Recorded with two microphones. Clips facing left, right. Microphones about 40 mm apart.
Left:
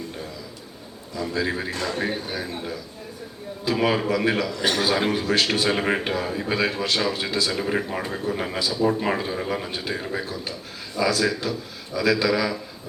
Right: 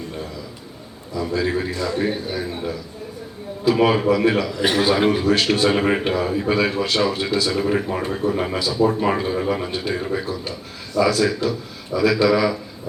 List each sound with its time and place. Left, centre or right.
1.3 s a man's voice: centre
1.7 s speech: left
2.0 s a man's voice: centre
4.5 s a man's voice: centre